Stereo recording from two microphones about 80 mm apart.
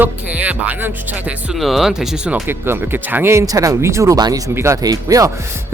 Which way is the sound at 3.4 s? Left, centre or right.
Right.